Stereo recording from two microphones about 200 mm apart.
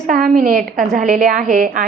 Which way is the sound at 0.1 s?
45° right (ahead or behind).